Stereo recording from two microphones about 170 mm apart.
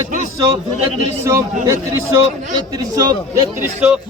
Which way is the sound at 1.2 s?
15° right (ahead or behind).